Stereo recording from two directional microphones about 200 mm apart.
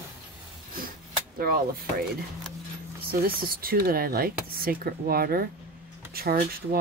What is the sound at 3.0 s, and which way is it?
Speech, 50° right (ahead or behind).